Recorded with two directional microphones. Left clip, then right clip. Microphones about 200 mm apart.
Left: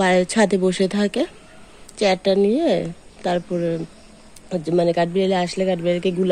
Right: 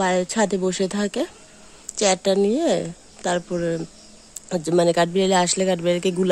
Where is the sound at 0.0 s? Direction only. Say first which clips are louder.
Left 4 dB; centre (ahead or behind).